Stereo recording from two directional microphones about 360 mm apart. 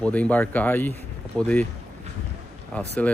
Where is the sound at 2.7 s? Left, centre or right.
Centre.